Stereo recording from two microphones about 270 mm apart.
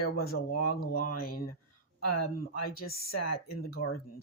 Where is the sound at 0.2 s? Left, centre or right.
Left.